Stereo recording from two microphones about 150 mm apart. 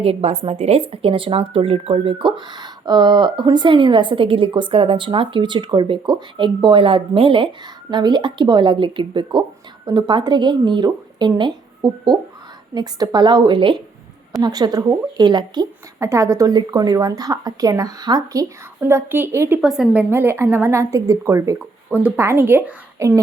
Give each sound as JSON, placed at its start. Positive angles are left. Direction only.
{"t": 0.0, "sound": "a woman's voice", "side_deg": -40}
{"t": 19.6, "sound": "a woman's voice", "side_deg": -5}
{"t": 21.9, "sound": "a woman's voice", "side_deg": -10}